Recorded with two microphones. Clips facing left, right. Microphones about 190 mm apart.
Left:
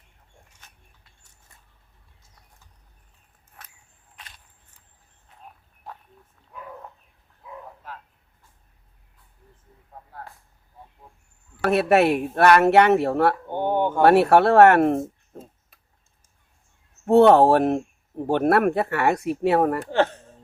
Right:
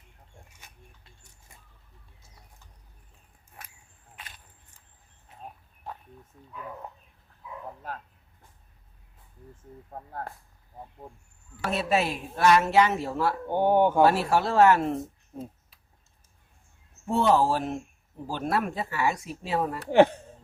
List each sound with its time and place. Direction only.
0.6 s a sound: 10° right (ahead or behind)
3.6 s a sound: 10° right (ahead or behind)
9.9 s speech: 50° right (ahead or behind)
11.6 s speech: 65° left (ahead or behind)
13.5 s speech: 10° right (ahead or behind)
14.0 s speech: 65° left (ahead or behind)
17.1 s speech: 65° left (ahead or behind)